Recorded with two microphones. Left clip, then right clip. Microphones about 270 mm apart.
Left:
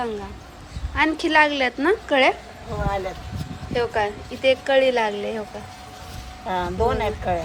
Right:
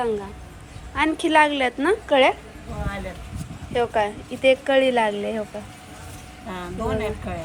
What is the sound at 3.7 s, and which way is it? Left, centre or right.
Speech, centre.